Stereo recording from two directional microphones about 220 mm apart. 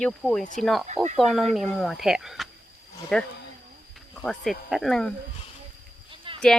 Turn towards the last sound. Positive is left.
turn(degrees=-25)  # may be behind; listen again after turning